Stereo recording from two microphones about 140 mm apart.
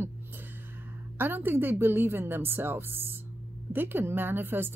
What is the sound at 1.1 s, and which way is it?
Speech, 15° right (ahead or behind).